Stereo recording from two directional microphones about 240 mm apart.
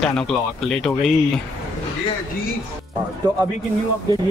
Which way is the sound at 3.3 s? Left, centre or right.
Centre.